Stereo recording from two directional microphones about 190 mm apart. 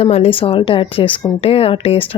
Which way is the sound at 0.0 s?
30° left (ahead or behind).